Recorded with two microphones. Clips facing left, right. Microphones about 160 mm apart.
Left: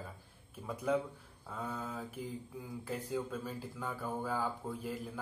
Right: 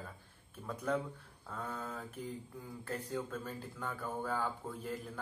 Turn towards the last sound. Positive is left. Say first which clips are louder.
# left 1 dB
turn(degrees=5)  # may be behind; listen again after turning